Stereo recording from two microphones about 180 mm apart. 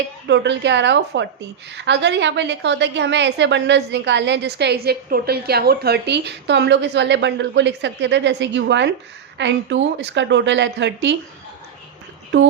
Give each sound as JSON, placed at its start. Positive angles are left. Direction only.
{"t": 0.3, "sound": "a woman's voice", "side_deg": -75}